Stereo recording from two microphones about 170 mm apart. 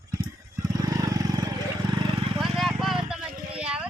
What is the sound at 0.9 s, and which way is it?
Vehicle, 20° right (ahead or behind).